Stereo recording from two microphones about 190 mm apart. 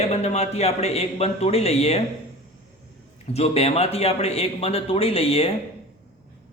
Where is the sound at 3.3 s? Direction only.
35° left (ahead or behind).